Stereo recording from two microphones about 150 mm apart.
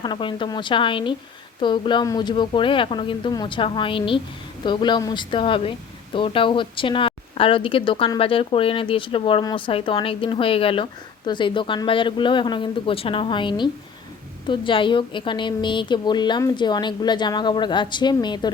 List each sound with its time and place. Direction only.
0.0 s speech: 30° left (ahead or behind)